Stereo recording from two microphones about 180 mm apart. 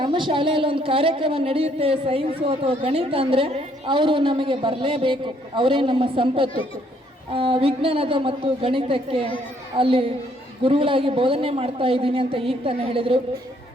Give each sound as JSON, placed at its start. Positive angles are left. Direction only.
{"t": 0.0, "sound": "a woman's voice", "side_deg": -25}